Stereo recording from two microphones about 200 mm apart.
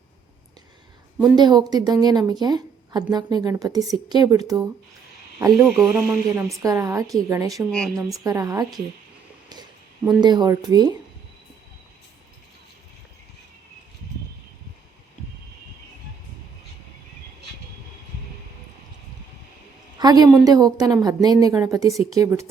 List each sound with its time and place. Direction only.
1.4 s a woman's voice: 20° right (ahead or behind)
5.6 s speech: 5° right (ahead or behind)
6.3 s a woman's voice: 15° right (ahead or behind)
10.2 s a woman's voice: 20° right (ahead or behind)
20.0 s a woman's voice: 20° right (ahead or behind)